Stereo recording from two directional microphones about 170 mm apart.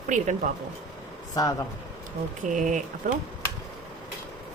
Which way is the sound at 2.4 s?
50° right (ahead or behind).